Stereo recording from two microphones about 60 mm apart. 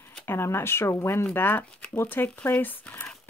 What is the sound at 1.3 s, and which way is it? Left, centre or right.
Speech, left.